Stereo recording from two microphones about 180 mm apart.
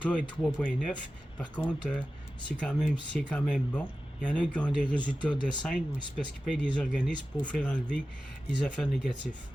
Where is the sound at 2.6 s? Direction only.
Centre (ahead or behind).